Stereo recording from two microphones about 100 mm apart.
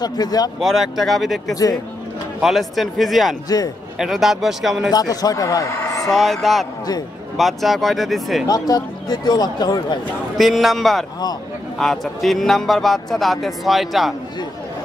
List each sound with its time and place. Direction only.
0.0 s speech: 40° left (ahead or behind)
0.6 s speech: centre (ahead or behind)
1.5 s speech: 40° left (ahead or behind)
2.4 s speech: centre (ahead or behind)
3.4 s speech: 40° left (ahead or behind)
4.0 s speech: centre (ahead or behind)
4.9 s speech: 40° left (ahead or behind)
6.0 s speech: 5° left (ahead or behind)
8.5 s speech: 40° left (ahead or behind)
10.3 s speech: centre (ahead or behind)